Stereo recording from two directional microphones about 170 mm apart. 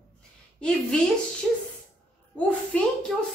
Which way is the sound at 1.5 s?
Centre (ahead or behind).